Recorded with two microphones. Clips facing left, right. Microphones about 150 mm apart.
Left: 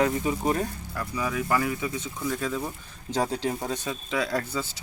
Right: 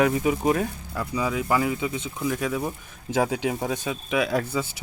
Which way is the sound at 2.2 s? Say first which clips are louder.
Right 3 dB; 10° right (ahead or behind).